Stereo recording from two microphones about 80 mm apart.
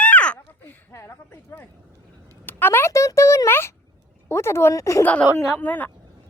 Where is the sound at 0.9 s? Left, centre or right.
Left.